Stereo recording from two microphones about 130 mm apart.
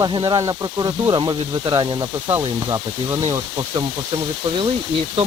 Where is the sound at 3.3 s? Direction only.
25° right (ahead or behind).